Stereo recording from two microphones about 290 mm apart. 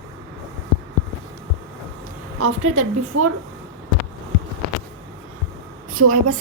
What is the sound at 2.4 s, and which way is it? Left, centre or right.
Speech, right.